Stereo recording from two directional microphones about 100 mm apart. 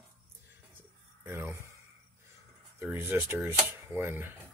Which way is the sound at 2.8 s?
25° right (ahead or behind).